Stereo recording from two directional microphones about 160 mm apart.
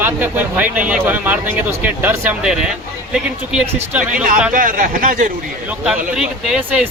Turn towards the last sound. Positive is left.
turn(degrees=-5)  # may be behind; listen again after turning